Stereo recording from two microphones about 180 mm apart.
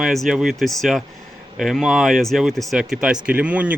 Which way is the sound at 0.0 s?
Centre (ahead or behind).